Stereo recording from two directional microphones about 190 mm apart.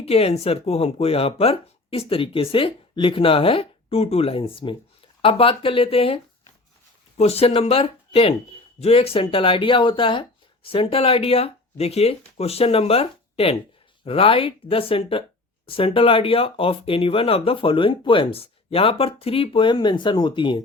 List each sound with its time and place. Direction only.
0.0 s speech: 30° left (ahead or behind)
7.2 s speech: 30° left (ahead or behind)